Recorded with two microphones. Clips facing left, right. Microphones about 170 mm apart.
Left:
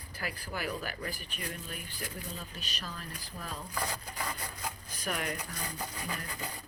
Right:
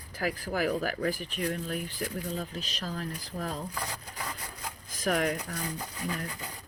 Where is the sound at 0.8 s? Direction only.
90° right.